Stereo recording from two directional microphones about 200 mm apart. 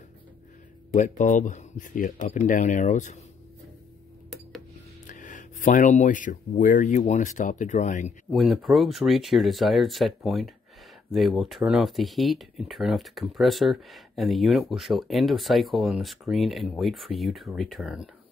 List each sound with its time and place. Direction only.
0.9 s speech: 40° left (ahead or behind)
5.0 s speech: 40° left (ahead or behind)
8.3 s speech: centre (ahead or behind)